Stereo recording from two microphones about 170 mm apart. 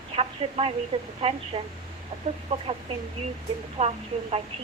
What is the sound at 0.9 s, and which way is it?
Child singing, 35° right (ahead or behind).